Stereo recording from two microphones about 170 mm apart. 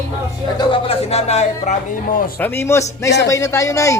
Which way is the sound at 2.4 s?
15° left (ahead or behind).